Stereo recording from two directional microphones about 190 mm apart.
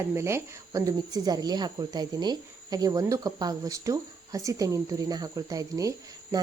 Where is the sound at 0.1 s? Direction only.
15° right (ahead or behind).